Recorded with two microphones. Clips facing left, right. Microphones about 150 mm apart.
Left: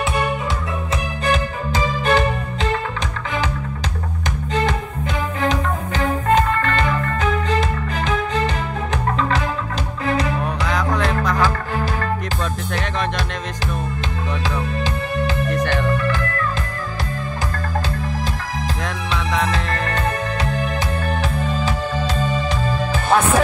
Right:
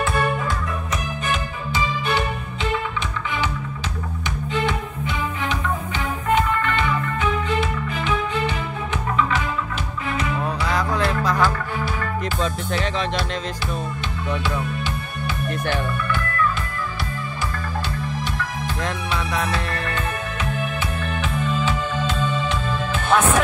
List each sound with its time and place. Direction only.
1.2 s music: 40° left (ahead or behind)
4.6 s music: 40° left (ahead or behind)
14.8 s music: 90° left
21.1 s music: 40° left (ahead or behind)